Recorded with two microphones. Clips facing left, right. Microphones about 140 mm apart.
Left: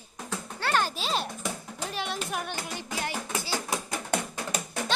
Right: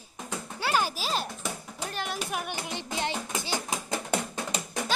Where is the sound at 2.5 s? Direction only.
25° right (ahead or behind).